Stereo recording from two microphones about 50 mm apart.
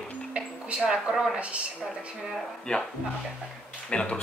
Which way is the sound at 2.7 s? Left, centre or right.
Left.